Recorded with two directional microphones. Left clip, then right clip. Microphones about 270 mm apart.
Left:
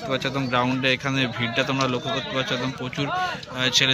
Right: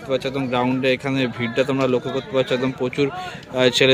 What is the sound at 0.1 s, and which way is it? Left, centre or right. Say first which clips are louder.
A man's voice: right 3 dB; centre.